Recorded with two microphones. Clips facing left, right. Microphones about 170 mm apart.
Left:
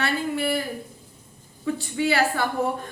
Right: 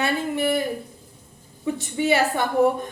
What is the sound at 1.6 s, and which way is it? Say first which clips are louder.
Speech: right 1 dB; 20° right (ahead or behind).